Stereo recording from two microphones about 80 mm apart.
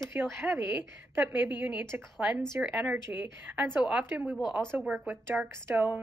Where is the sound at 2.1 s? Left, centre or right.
Centre.